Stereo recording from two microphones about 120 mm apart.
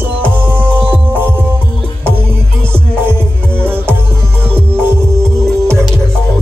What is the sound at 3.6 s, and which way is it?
Music, 20° right (ahead or behind).